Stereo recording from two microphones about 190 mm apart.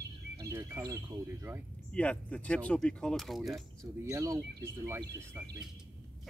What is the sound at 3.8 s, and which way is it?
Speech, 15° right (ahead or behind).